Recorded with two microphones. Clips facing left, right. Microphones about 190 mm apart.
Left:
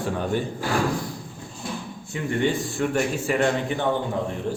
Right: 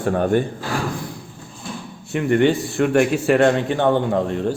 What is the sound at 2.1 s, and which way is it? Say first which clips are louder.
A man's voice: right 7 dB; 70° right (ahead or behind).